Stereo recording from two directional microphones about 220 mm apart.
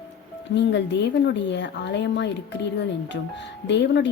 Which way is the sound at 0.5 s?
55° left (ahead or behind).